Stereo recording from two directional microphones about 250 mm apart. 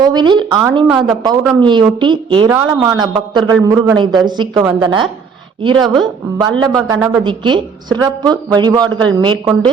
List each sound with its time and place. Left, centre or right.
0.0 s a woman's voice: centre